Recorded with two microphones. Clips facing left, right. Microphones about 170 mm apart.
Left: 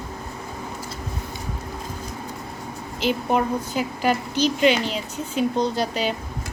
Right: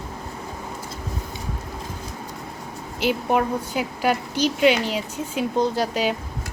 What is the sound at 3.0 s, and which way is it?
A woman's voice, 10° right (ahead or behind).